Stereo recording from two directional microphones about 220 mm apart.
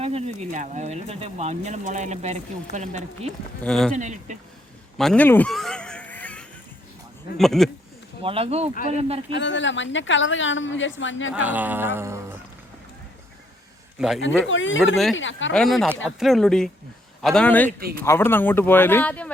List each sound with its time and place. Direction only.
0.0 s speech: 30° right (ahead or behind)
3.6 s speech: centre (ahead or behind)
3.9 s speech: 35° right (ahead or behind)
4.9 s a sound: 5° left (ahead or behind)
7.3 s speech: centre (ahead or behind)
8.2 s speech: 25° right (ahead or behind)
9.3 s a woman's voice: 55° left (ahead or behind)
11.3 s music: 5° right (ahead or behind)
14.2 s a woman's voice: 60° left (ahead or behind)
15.5 s speech: centre (ahead or behind)
17.7 s speech: 40° right (ahead or behind)
18.0 s speech: 10° left (ahead or behind)